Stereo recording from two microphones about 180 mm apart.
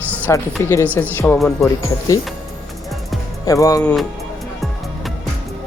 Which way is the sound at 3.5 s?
20° left (ahead or behind).